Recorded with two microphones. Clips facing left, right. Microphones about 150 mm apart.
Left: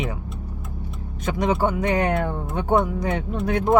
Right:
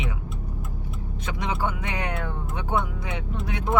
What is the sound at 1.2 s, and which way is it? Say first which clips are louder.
Speech: left 7 dB; 45° left (ahead or behind).